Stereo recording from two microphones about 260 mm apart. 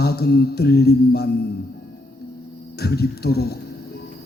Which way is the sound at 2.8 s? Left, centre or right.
Left.